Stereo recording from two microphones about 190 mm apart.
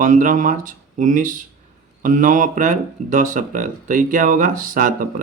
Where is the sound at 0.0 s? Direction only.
45° right (ahead or behind).